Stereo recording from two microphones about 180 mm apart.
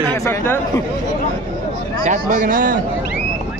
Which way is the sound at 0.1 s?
15° left (ahead or behind).